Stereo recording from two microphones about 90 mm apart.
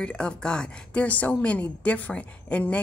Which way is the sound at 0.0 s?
10° left (ahead or behind).